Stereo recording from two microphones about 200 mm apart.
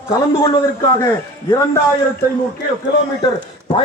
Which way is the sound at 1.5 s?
15° left (ahead or behind).